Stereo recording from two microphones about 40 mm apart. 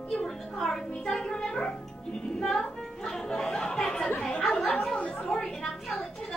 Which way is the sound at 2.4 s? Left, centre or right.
Centre.